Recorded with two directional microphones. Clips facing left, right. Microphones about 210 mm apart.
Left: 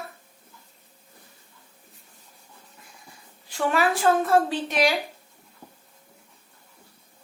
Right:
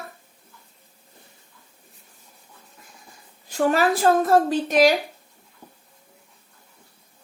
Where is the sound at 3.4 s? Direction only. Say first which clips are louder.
Right 4 dB; 40° right (ahead or behind).